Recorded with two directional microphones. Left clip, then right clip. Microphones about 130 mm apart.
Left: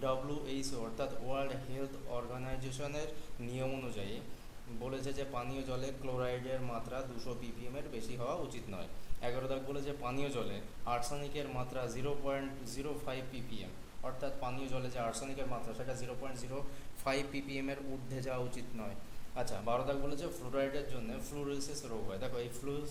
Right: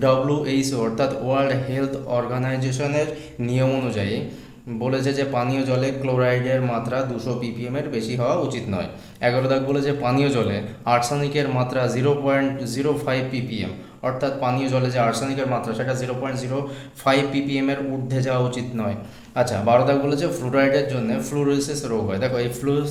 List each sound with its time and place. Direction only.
0.0 s a man's voice: 20° left (ahead or behind)
17.1 s a man's voice: 50° left (ahead or behind)
19.4 s a man's voice: 30° left (ahead or behind)